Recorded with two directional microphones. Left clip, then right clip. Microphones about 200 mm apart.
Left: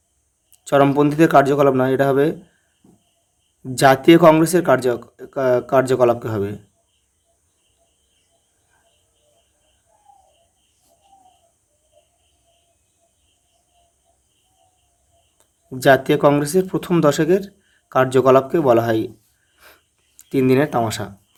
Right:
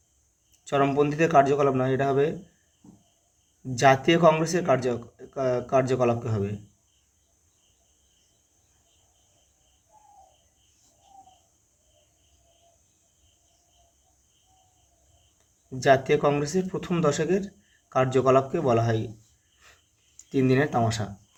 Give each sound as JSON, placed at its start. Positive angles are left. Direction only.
{"t": 0.6, "sound": "speech", "side_deg": 45}
{"t": 3.6, "sound": "speech", "side_deg": 45}
{"t": 15.7, "sound": "speech", "side_deg": 45}
{"t": 20.1, "sound": "speech", "side_deg": 40}